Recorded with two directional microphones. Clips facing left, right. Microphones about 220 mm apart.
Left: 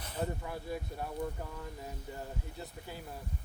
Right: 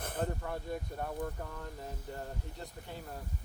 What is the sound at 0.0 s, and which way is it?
Vehicle, 50° right (ahead or behind).